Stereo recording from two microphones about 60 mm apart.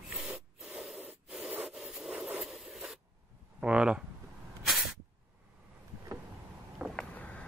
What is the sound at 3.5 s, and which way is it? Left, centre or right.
Speech, centre.